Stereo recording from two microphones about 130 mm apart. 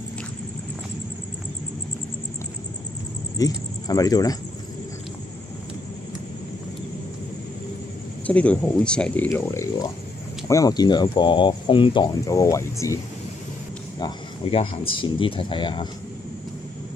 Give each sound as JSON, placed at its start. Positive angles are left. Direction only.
{"t": 3.3, "sound": "speech", "side_deg": 30}
{"t": 8.3, "sound": "speech", "side_deg": 10}
{"t": 14.5, "sound": "speech", "side_deg": 40}